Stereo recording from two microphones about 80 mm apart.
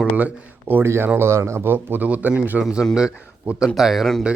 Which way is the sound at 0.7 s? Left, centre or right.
Right.